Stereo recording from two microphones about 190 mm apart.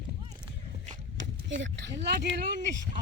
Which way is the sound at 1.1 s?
70° right (ahead or behind).